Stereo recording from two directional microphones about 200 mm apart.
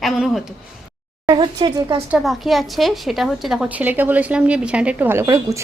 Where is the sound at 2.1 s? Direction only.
Centre (ahead or behind).